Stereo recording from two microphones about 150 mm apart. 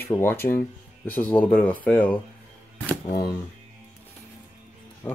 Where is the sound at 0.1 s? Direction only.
15° left (ahead or behind).